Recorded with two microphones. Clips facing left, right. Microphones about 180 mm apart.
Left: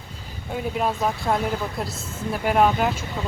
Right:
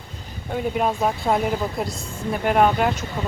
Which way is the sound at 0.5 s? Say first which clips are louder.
Right 2 dB; centre (ahead or behind).